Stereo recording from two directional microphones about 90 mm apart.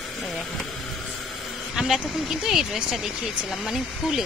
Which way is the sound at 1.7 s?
5° right (ahead or behind).